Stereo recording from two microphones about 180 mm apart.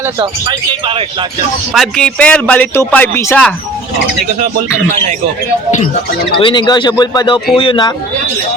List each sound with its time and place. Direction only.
0.2 s speech: 30° right (ahead or behind)
1.7 s speech: centre (ahead or behind)
6.4 s speech: 25° left (ahead or behind)